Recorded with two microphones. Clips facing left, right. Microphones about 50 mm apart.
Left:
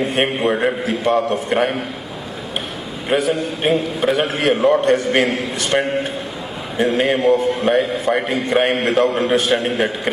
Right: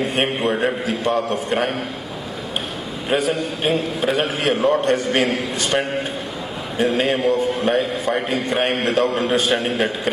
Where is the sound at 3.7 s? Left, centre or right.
Centre.